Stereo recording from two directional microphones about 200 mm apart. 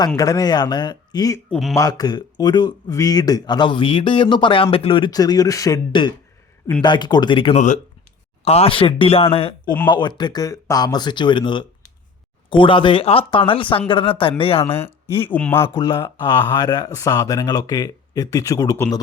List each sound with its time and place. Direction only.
0.2 s speech: 20° left (ahead or behind)
15.2 s speech: 10° left (ahead or behind)